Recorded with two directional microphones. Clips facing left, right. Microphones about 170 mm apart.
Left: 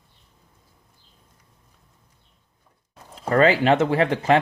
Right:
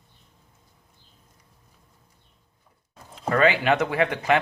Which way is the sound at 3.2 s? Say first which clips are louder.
Left 3 dB; 35° left (ahead or behind).